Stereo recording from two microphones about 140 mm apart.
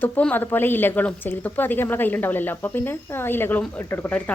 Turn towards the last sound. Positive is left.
turn(degrees=10)  # may be behind; listen again after turning